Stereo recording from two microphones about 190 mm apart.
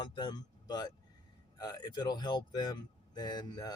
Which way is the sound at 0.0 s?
25° left (ahead or behind).